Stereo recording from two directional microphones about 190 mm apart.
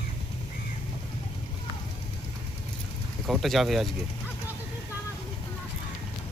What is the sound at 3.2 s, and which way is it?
Speech, centre (ahead or behind).